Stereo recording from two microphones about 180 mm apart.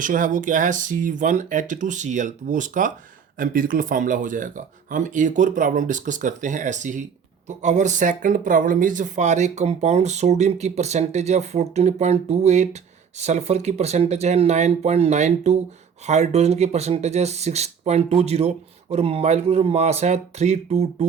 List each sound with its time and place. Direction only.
0.0 s speech: 50° right (ahead or behind)